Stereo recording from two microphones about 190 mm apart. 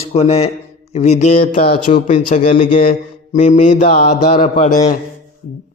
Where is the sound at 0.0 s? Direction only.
30° left (ahead or behind).